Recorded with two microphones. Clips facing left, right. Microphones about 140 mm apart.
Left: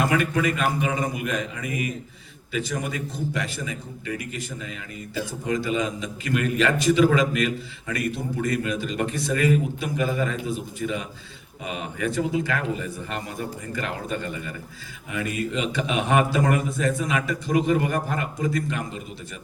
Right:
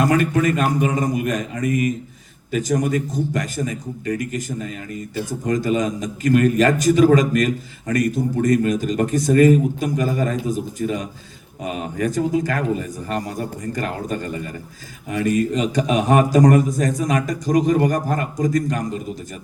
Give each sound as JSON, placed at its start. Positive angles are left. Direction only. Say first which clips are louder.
{"t": 0.0, "sound": "a man's voice", "louder": "right 5 dB", "side_deg": -40}